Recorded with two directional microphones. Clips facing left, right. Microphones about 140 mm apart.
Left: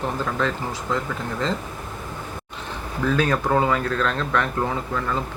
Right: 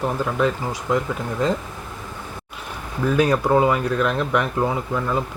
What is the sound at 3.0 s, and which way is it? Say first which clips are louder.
Speech: right 3 dB; 15° right (ahead or behind).